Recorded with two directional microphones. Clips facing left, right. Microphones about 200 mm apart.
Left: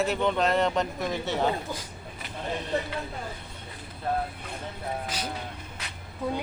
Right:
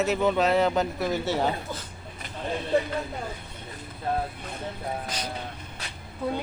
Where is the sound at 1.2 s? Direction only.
20° left (ahead or behind).